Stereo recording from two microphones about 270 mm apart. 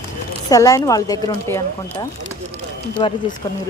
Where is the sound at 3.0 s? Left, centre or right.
Centre.